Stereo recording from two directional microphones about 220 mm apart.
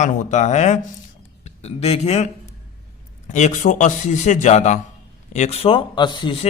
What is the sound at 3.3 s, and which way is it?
Speech, 30° left (ahead or behind).